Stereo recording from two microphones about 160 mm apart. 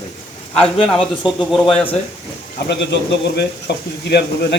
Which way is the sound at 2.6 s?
90° left.